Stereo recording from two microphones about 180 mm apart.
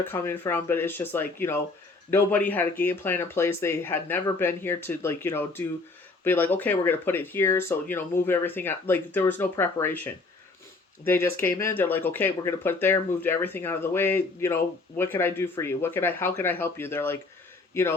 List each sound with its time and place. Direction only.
0.1 s speech: 10° left (ahead or behind)